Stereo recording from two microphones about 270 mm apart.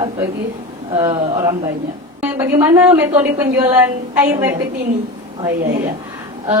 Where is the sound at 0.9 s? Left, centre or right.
Centre.